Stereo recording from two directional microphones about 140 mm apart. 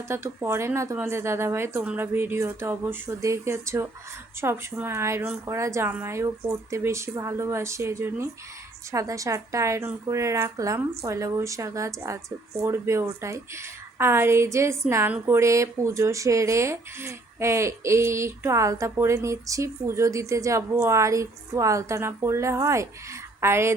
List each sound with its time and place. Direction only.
0.1 s a woman's voice: 20° right (ahead or behind)